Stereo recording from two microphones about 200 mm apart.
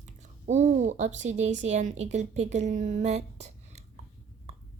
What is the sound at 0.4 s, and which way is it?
Speech, 35° right (ahead or behind).